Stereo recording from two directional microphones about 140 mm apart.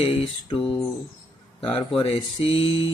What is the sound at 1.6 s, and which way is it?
Speech, 40° left (ahead or behind).